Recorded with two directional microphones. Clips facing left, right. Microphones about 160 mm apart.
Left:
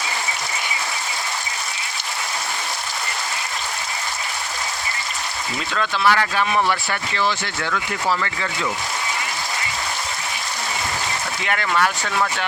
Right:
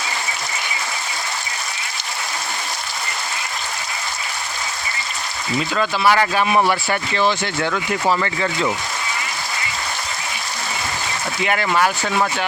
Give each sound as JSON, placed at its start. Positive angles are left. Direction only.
{"t": 5.7, "sound": "speech", "side_deg": -10}
{"t": 11.4, "sound": "speech", "side_deg": -10}